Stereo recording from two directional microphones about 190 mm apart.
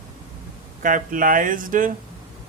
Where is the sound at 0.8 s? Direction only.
45° right (ahead or behind).